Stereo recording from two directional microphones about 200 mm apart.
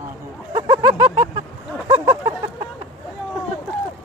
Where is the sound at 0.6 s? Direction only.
20° right (ahead or behind).